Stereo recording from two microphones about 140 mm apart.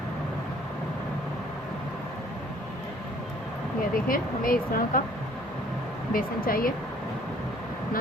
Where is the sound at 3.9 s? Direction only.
90° left.